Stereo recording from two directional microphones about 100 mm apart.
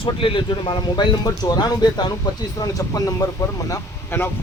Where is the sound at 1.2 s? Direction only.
40° left (ahead or behind).